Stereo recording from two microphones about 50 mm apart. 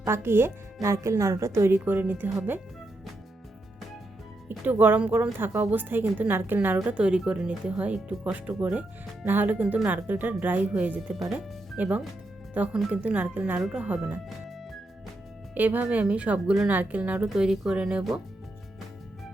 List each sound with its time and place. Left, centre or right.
0.0 s a woman's voice: right
0.8 s a woman's voice: right
4.4 s speech: right
6.9 s speech: right
15.5 s speech: right
17.3 s speech: centre